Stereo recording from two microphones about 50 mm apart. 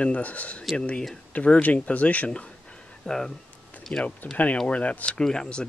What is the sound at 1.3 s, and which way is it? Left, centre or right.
Speech, left.